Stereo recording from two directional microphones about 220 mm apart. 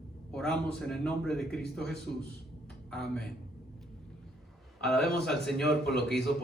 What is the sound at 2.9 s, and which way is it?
Speech, centre (ahead or behind).